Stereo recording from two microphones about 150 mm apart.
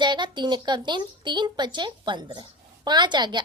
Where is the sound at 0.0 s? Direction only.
30° right (ahead or behind).